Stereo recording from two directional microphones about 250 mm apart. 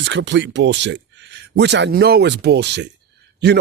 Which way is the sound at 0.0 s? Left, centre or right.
Right.